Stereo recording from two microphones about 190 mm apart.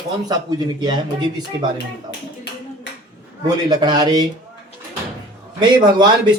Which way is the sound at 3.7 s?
20° right (ahead or behind).